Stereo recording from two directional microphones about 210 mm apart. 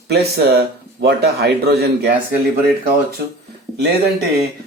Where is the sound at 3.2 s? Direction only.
50° right (ahead or behind).